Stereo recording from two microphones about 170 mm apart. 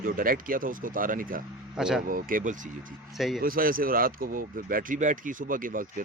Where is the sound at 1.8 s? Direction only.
5° right (ahead or behind).